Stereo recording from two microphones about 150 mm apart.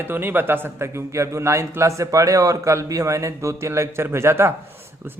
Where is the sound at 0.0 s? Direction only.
15° right (ahead or behind).